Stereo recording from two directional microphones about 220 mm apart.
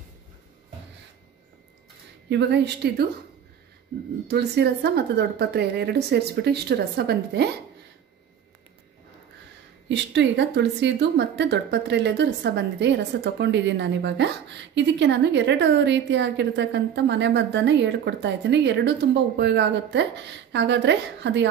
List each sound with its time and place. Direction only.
2.2 s speech: 50° right (ahead or behind)
4.3 s speech: 45° right (ahead or behind)
9.8 s speech: 55° right (ahead or behind)